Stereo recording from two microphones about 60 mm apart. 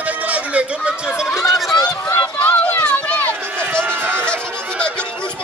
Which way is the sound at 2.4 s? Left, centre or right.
Left.